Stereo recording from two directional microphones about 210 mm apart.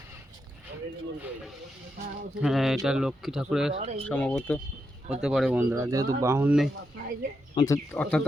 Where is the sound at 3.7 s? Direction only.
30° right (ahead or behind).